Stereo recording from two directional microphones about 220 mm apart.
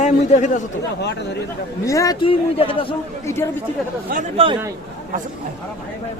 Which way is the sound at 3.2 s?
10° left (ahead or behind).